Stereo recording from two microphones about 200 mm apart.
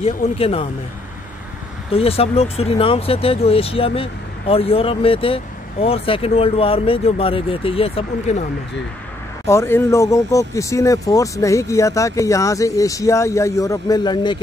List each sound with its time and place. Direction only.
0.4 s speech: 30° left (ahead or behind)
1.9 s speech: 30° left (ahead or behind)
9.5 s speech: 10° left (ahead or behind)